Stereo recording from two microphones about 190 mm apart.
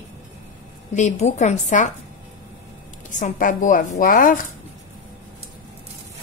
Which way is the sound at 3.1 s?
45° left (ahead or behind).